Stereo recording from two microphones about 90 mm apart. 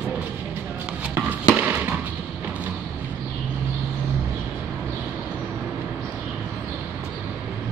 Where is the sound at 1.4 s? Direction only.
15° right (ahead or behind).